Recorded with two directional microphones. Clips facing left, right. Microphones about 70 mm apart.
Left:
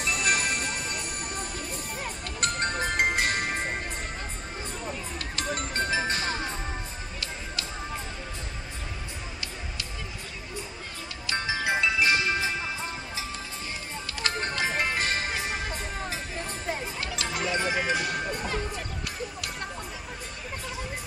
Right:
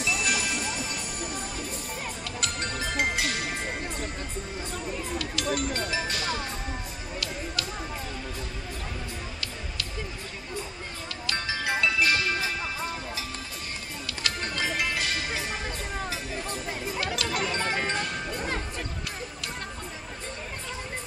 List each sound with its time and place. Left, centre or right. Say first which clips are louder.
0.0 s music: left 1 dB; left
2.4 s music: left 5 dB; left
5.2 s music: right 2 dB; left
11.2 s music: left 2 dB; left
14.0 s music: left 2 dB; left
17.0 s a sound: right 3 dB; left
17.6 s music: left 2 dB; centre